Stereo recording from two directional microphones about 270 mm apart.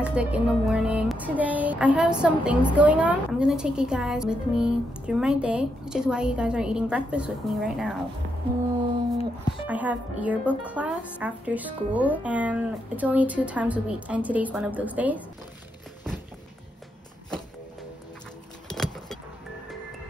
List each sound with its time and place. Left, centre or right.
0.0 s music: centre
9.2 s speech: centre
9.7 s music: centre
18.7 s vehicle: centre